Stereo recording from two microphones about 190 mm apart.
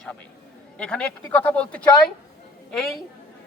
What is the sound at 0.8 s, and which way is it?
Speech, 5° left (ahead or behind).